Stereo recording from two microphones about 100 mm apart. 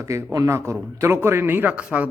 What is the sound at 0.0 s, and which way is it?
A man's voice, 30° right (ahead or behind).